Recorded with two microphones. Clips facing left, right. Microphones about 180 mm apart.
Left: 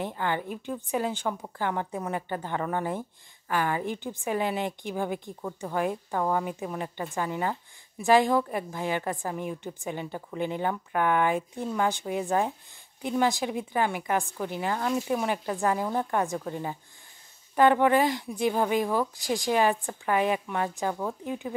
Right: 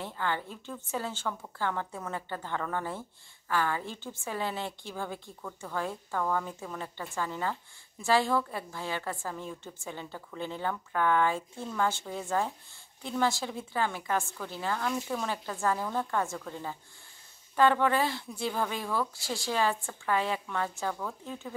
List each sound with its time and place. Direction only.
0.0 s a woman's voice: 15° left (ahead or behind)